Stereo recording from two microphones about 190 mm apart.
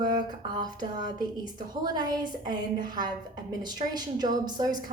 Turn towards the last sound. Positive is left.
turn(degrees=-20)  # may be behind; listen again after turning